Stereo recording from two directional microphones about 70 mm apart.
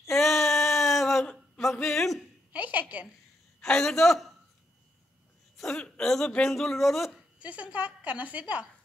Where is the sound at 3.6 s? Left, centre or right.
Centre.